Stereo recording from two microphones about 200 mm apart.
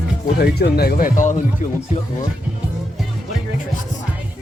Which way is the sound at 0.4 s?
50° left (ahead or behind).